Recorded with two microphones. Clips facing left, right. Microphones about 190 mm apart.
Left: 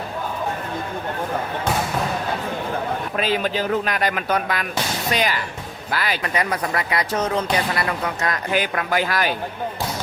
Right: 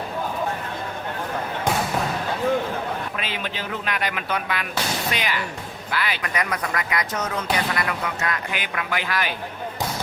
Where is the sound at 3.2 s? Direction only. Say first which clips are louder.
Left 8 dB; 40° left (ahead or behind).